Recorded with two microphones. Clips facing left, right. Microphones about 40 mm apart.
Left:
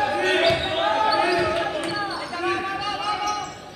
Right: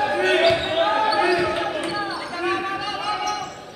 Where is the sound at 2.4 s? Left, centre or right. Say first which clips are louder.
Right 1 dB; centre.